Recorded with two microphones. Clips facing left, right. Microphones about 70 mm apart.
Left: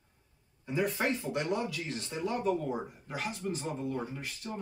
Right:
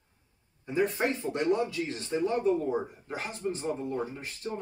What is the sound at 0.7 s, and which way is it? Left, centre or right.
Speech, right.